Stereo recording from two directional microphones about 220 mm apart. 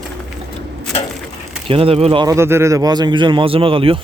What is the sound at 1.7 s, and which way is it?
A man's voice, 25° right (ahead or behind).